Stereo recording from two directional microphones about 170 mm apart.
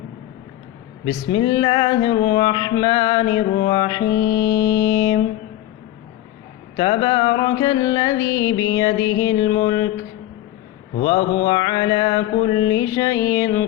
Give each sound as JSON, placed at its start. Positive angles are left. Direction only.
{"t": 1.0, "sound": "music", "side_deg": 25}
{"t": 6.7, "sound": "music", "side_deg": 25}
{"t": 11.0, "sound": "music", "side_deg": 25}